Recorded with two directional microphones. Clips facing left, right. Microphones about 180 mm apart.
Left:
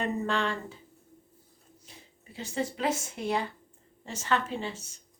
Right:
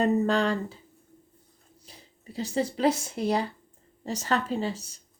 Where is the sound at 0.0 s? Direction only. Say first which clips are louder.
Right 6 dB; 40° right (ahead or behind).